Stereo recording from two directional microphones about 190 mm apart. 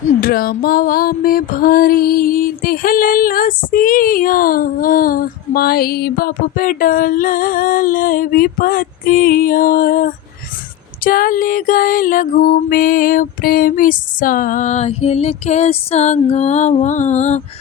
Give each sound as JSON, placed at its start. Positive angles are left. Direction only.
{"t": 0.0, "sound": "music", "side_deg": 50}